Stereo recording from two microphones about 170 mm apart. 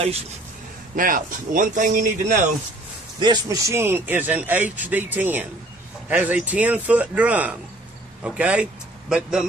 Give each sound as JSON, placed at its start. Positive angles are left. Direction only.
{"t": 0.9, "sound": "speech", "side_deg": -55}
{"t": 3.2, "sound": "a man's voice", "side_deg": -20}